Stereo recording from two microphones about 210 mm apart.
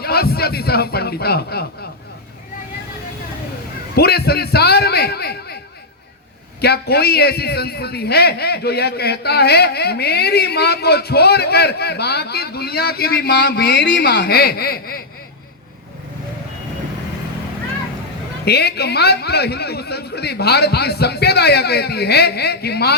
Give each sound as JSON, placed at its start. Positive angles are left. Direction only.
{"t": 0.0, "sound": "a man's voice", "side_deg": 50}
{"t": 3.9, "sound": "a man's voice", "side_deg": 50}
{"t": 6.6, "sound": "a man's voice", "side_deg": 50}
{"t": 18.4, "sound": "a man's voice", "side_deg": 50}